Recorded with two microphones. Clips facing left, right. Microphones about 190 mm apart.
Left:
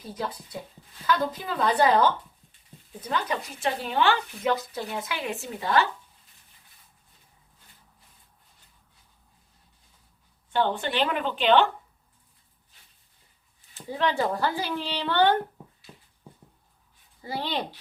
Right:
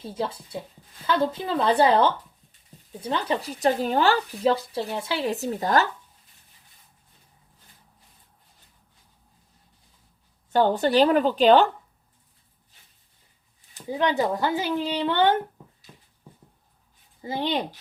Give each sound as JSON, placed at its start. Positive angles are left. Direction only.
{"t": 0.0, "sound": "a woman's voice", "side_deg": -25}
{"t": 10.5, "sound": "speech", "side_deg": -40}
{"t": 13.7, "sound": "speech", "side_deg": -15}
{"t": 17.2, "sound": "a woman's voice", "side_deg": -20}